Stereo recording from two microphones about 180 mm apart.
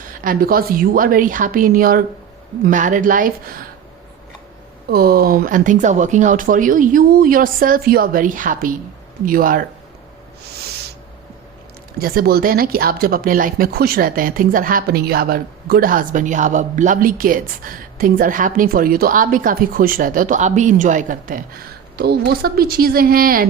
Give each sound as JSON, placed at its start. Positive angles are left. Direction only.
{"t": 0.1, "sound": "speech", "side_deg": -55}
{"t": 4.9, "sound": "speech", "side_deg": -55}
{"t": 11.9, "sound": "speech", "side_deg": -55}
{"t": 21.9, "sound": "a woman's voice", "side_deg": -60}